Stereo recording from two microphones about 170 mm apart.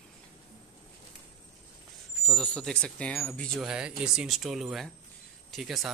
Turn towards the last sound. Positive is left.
turn(degrees=0)  # may be behind; listen again after turning